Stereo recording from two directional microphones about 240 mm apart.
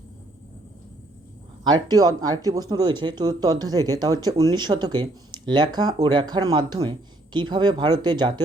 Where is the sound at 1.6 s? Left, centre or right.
Centre.